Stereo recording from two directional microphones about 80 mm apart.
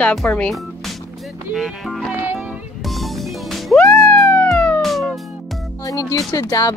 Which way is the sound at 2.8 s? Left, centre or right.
Centre.